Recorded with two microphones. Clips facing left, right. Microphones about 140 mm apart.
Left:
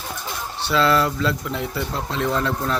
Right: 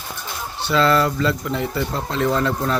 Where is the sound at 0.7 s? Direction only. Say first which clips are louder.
Right 2 dB; centre (ahead or behind).